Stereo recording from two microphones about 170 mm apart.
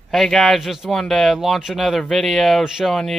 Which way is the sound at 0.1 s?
Centre (ahead or behind).